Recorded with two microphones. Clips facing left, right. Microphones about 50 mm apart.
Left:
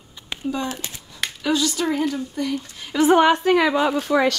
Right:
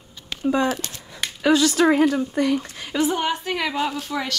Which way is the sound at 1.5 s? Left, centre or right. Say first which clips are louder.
Right 5 dB; right.